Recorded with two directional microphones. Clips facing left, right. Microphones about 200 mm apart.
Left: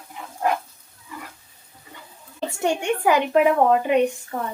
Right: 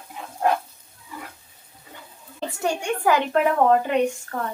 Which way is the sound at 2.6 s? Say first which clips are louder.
Left 2 dB; 20° left (ahead or behind).